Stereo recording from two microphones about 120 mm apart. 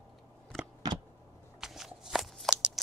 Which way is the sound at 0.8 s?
35° right (ahead or behind).